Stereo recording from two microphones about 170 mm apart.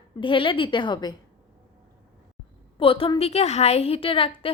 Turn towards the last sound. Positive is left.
turn(degrees=30)  # may be behind; listen again after turning